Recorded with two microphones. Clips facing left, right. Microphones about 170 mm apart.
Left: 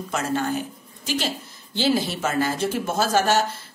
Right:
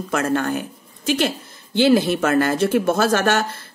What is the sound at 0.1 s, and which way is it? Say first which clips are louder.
A woman's voice: right 4 dB; 60° right (ahead or behind).